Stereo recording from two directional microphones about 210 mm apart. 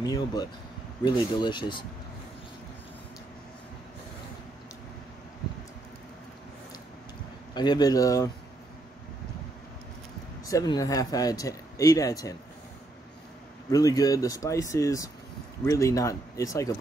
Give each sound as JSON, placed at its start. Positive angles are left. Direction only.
{"t": 0.0, "sound": "speech", "side_deg": 20}
{"t": 7.5, "sound": "speech", "side_deg": 20}
{"t": 10.4, "sound": "speech", "side_deg": 15}
{"t": 13.7, "sound": "speech", "side_deg": 15}